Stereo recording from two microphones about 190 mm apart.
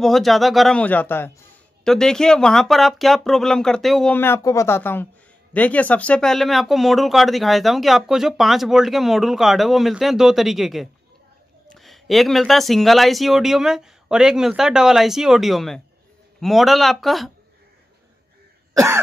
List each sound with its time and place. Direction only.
0.0 s speech: centre (ahead or behind)
18.7 s cough: 15° right (ahead or behind)